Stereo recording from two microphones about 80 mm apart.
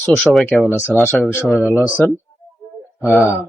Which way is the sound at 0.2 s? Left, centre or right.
Centre.